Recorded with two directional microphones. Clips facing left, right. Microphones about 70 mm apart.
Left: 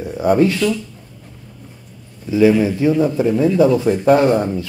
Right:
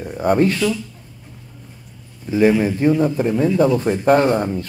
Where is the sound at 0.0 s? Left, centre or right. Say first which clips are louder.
Left 2 dB; centre.